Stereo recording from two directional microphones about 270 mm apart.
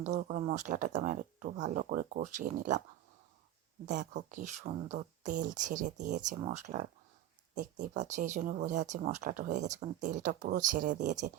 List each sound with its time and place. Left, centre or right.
0.0 s speech: right
3.8 s speech: right